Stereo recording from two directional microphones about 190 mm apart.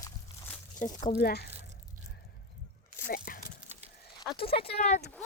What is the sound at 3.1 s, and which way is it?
Speech, 50° left (ahead or behind).